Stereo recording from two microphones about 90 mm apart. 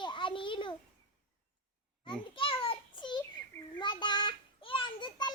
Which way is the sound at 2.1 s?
75° left (ahead or behind).